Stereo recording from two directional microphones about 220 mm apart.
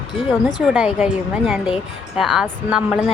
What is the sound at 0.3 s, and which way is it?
Speech, 5° right (ahead or behind).